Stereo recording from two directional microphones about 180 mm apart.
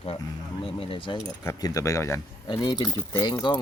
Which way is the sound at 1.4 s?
20° left (ahead or behind).